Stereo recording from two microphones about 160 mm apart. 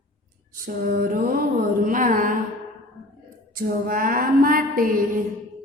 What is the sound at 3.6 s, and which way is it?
A woman's voice, 60° right (ahead or behind).